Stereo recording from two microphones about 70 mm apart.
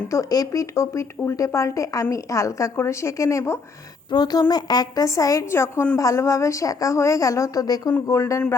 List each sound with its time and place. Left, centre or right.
0.1 s a woman's voice: left
4.1 s a woman's voice: left
5.5 s a woman's voice: left
8.0 s a woman's voice: left